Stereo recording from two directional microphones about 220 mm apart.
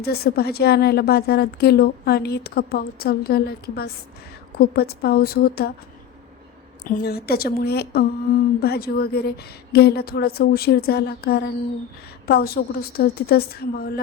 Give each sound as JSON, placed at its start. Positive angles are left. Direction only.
{"t": 0.0, "sound": "a woman's voice", "side_deg": 45}
{"t": 6.8, "sound": "a woman's voice", "side_deg": 45}